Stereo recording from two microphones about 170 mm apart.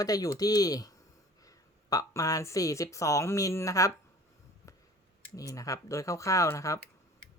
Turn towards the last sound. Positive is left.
turn(degrees=20)  # may be behind; listen again after turning